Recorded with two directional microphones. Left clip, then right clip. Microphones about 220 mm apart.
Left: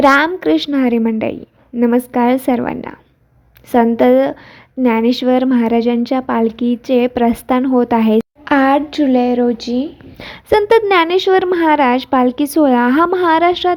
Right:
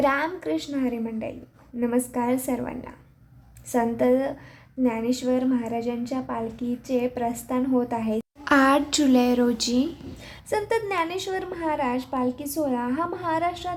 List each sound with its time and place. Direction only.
0.0 s a woman's voice: 30° left (ahead or behind)
8.4 s speech: 15° left (ahead or behind)
10.2 s a woman's voice: 30° left (ahead or behind)